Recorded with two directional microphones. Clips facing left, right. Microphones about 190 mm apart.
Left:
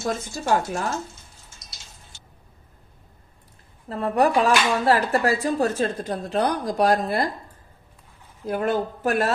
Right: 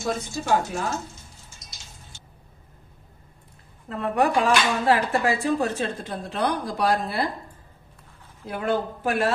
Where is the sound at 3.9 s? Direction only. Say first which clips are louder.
Left 2 dB; 35° left (ahead or behind).